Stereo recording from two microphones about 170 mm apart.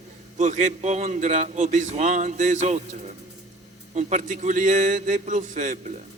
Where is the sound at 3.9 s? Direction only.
45° right (ahead or behind).